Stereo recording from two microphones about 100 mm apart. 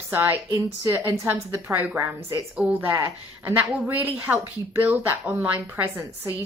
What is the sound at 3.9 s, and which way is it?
Speech, 15° right (ahead or behind).